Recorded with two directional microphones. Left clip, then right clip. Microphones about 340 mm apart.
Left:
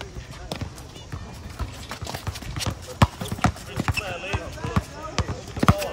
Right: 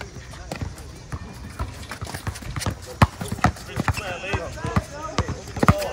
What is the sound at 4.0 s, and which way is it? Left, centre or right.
Basketball bounce, right.